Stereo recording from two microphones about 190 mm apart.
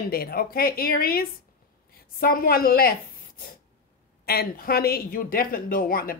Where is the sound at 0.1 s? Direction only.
50° left (ahead or behind).